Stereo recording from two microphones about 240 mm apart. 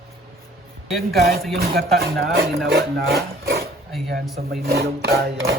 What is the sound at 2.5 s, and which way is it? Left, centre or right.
Speech, centre.